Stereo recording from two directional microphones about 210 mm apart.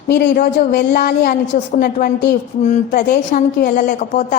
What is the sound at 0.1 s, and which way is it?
A woman's voice, 45° left (ahead or behind).